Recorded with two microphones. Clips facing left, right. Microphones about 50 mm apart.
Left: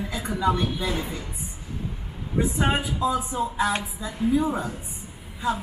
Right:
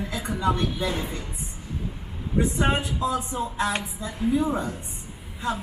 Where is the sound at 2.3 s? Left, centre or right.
Centre.